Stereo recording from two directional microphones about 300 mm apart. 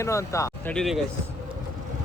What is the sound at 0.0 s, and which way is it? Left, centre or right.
Speech, centre.